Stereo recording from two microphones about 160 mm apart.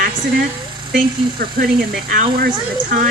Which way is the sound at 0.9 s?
65° right (ahead or behind).